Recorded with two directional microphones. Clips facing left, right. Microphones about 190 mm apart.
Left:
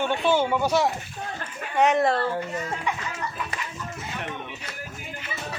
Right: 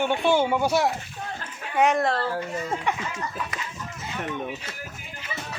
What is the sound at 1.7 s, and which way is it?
Speech, centre (ahead or behind).